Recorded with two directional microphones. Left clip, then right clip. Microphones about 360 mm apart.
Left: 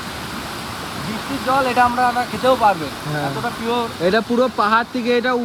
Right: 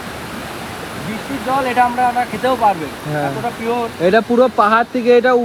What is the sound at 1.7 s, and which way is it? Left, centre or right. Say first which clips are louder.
Speech: right 3 dB; centre.